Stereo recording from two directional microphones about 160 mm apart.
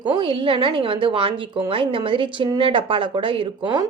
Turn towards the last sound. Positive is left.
turn(degrees=-30)  # may be behind; listen again after turning